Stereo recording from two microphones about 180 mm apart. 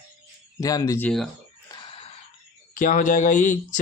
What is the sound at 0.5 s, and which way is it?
Speech, 20° left (ahead or behind).